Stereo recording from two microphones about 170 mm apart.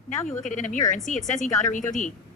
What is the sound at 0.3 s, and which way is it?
Speech, 45° left (ahead or behind).